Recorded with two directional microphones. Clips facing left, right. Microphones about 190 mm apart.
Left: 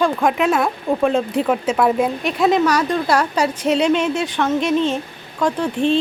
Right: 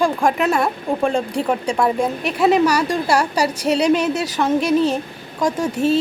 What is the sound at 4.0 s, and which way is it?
A woman's voice, 40° right (ahead or behind).